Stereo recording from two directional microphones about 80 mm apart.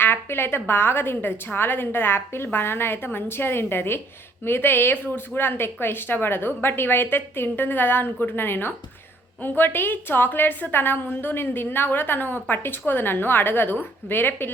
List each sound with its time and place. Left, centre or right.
0.0 s a woman's voice: left